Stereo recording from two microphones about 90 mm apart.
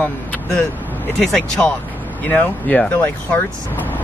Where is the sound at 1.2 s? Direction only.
10° left (ahead or behind).